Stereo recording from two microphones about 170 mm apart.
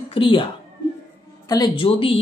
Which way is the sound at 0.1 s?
30° left (ahead or behind).